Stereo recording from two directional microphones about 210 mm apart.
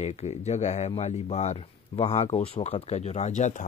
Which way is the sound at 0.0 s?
30° left (ahead or behind).